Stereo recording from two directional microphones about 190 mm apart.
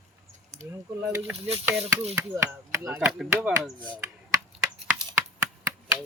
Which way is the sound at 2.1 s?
15° right (ahead or behind).